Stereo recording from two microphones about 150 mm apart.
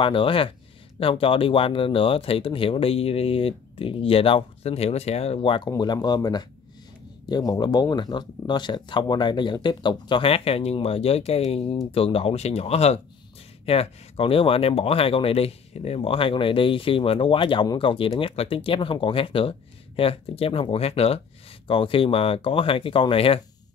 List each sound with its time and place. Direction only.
0.0 s speech: 35° left (ahead or behind)